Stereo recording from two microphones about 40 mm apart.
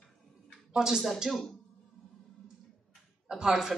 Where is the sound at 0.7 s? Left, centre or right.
Centre.